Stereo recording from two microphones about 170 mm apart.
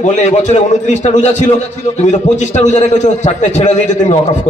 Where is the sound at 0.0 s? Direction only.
45° left (ahead or behind).